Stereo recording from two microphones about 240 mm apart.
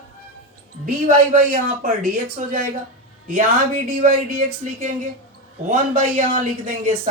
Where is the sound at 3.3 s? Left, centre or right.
Right.